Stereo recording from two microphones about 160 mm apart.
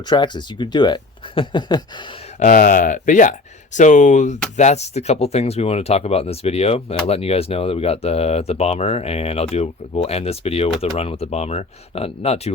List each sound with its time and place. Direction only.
0.1 s speech: 30° left (ahead or behind)
2.4 s speech: 55° left (ahead or behind); by 12.5 s 40° left (ahead or behind)